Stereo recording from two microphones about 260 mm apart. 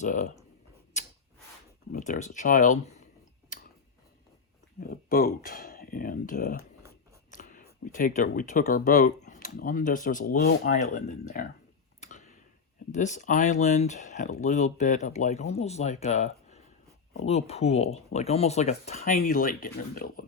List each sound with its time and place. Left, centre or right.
0.0 s speech: left
0.9 s a sound: left
1.9 s speech: left
3.5 s tick-tock: left
4.8 s speech: left
11.9 s tick-tock: left
12.9 s speech: left